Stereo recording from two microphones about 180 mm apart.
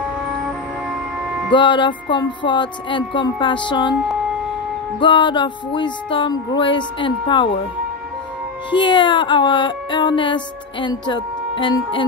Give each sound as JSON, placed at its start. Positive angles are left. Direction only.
{"t": 1.5, "sound": "music", "side_deg": 25}
{"t": 5.0, "sound": "music", "side_deg": 25}
{"t": 8.6, "sound": "music", "side_deg": 25}